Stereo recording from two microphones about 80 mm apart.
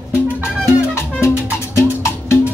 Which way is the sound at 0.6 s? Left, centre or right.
Left.